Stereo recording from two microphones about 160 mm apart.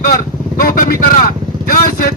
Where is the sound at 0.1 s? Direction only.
60° left (ahead or behind).